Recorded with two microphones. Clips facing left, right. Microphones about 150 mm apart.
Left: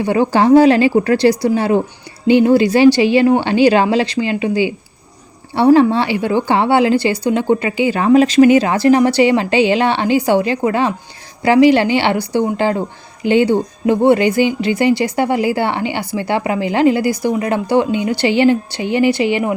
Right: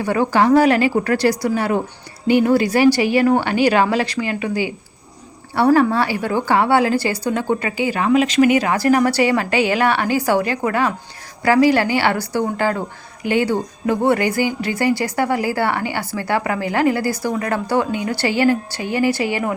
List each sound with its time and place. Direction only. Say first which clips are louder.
0.0 s speech: left 3 dB; 25° left (ahead or behind)